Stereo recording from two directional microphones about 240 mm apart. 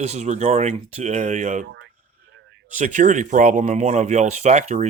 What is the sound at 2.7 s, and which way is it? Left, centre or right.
Speech, right.